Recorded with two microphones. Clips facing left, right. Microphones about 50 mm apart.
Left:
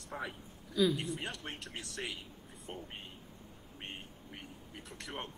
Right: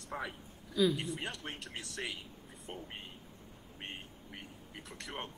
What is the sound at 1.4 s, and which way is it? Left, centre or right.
Speech, centre.